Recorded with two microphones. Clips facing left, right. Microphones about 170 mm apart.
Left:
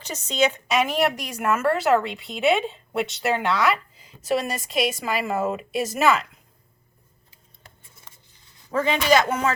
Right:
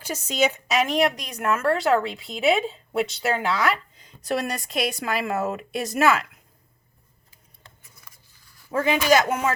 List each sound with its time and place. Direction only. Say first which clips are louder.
0.0 s speech: left 1 dB; 10° right (ahead or behind)
0.8 s a woman's voice: right 1 dB; 5° left (ahead or behind)
7.8 s a sound: even; 25° left (ahead or behind)
8.7 s speech: even; 10° right (ahead or behind)